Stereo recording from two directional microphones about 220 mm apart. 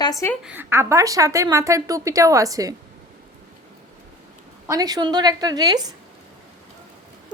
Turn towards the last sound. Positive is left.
turn(degrees=-15)  # may be behind; listen again after turning